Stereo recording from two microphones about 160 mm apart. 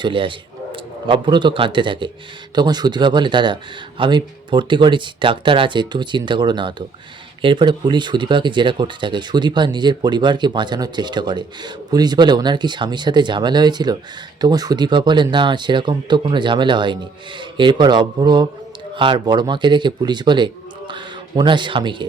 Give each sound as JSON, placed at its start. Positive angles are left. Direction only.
{"t": 0.0, "sound": "a man's voice", "side_deg": -30}